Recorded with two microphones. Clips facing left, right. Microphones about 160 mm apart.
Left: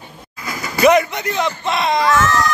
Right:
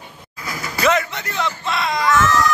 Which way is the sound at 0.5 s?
15° left (ahead or behind).